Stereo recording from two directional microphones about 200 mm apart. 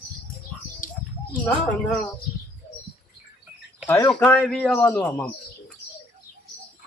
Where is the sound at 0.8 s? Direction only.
40° left (ahead or behind).